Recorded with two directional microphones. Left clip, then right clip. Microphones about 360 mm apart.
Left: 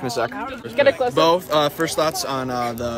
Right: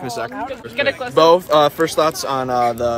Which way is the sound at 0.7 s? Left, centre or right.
Left.